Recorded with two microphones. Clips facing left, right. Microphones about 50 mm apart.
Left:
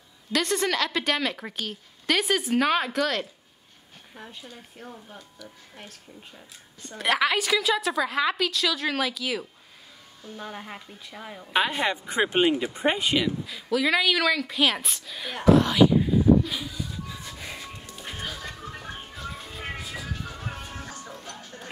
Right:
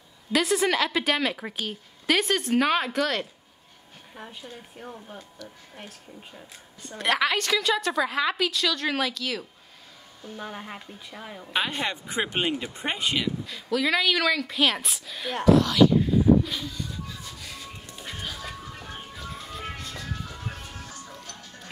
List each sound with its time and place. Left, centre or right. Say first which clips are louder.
0.3 s a woman's voice: right 2 dB; centre
10.2 s a woman's voice: right 1 dB; centre
15.4 s speech: even; left
15.9 s a sound: even; centre
17.1 s music: left 2 dB; left
19.1 s music: even; centre
20.2 s music: left 2 dB; left
20.7 s music: left 3 dB; left
21.0 s music: left 2 dB; left